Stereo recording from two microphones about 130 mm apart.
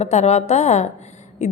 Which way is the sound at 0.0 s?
60° left (ahead or behind).